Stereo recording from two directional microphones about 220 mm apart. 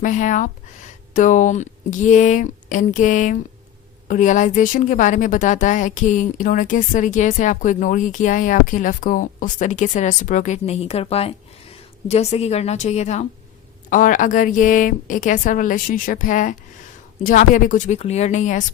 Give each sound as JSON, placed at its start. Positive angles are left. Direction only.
{"t": 0.0, "sound": "a woman's voice", "side_deg": 35}